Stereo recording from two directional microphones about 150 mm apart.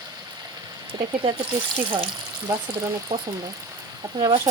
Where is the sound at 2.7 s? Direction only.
15° right (ahead or behind).